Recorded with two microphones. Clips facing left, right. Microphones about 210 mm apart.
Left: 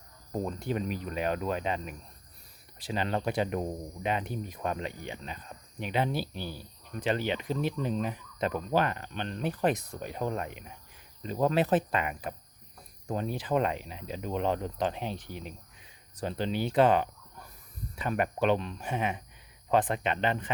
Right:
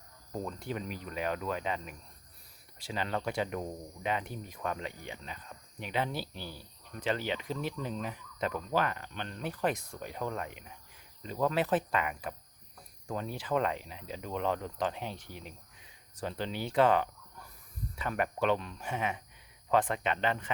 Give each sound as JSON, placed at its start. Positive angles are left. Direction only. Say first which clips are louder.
{"t": 0.4, "sound": "speech", "louder": "left 6 dB", "side_deg": 25}